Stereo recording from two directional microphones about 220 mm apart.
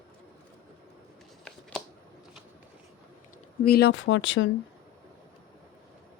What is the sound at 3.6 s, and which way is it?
Speech, 45° left (ahead or behind).